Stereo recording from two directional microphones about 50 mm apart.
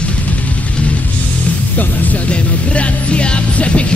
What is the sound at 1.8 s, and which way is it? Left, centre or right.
Music, left.